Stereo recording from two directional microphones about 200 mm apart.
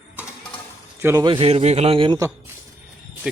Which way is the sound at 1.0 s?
20° right (ahead or behind).